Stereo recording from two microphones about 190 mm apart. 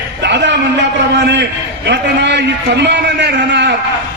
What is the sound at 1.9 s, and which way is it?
A man's voice, 65° right (ahead or behind).